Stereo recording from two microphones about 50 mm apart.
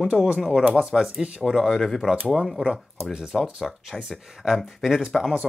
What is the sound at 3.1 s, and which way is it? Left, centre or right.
Speech, centre.